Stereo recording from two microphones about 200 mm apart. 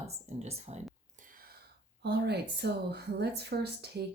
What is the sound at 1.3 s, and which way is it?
Speech, 50° right (ahead or behind).